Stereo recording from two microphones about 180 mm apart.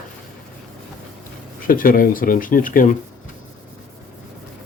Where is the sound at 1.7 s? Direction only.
50° left (ahead or behind).